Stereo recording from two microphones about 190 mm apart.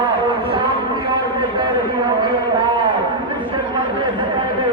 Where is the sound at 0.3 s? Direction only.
25° right (ahead or behind).